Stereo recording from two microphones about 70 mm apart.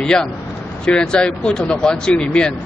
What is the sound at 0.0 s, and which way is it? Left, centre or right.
Speech, centre.